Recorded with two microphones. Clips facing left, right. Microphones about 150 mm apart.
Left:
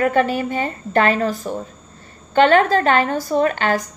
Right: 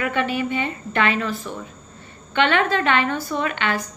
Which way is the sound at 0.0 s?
40° left (ahead or behind).